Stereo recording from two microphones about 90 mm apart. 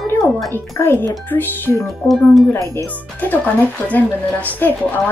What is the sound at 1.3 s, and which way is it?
Speech, 20° left (ahead or behind).